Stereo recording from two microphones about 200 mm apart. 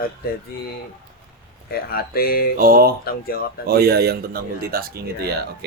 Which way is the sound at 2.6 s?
45° right (ahead or behind).